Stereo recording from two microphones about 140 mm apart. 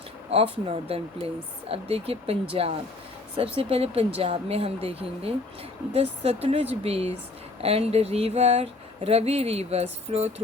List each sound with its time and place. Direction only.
0.3 s speech: 45° right (ahead or behind)